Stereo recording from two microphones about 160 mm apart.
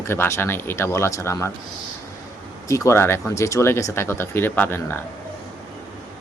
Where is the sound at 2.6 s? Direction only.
20° left (ahead or behind).